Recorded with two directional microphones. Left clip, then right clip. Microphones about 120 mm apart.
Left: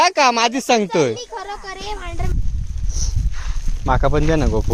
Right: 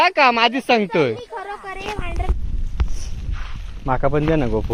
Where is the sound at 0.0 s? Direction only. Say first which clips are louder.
Even; 20° left (ahead or behind); by 1.8 s 35° left (ahead or behind).